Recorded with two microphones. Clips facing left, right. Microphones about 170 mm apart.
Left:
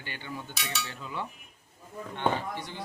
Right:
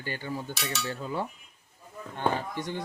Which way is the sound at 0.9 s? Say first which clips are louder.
Right 5 dB; 40° right (ahead or behind).